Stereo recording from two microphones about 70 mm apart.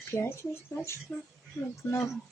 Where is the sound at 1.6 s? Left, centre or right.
Left.